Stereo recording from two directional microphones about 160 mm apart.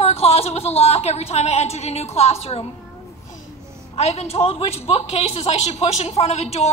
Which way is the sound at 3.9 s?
40° left (ahead or behind).